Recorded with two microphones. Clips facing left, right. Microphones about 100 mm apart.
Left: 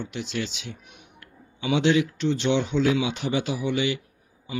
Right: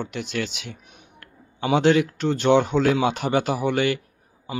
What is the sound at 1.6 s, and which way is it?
Speech, 45° right (ahead or behind).